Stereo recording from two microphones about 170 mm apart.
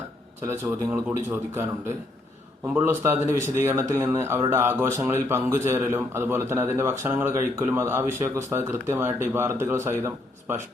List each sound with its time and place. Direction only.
0.4 s speech: 15° right (ahead or behind)
2.7 s speech: 15° right (ahead or behind)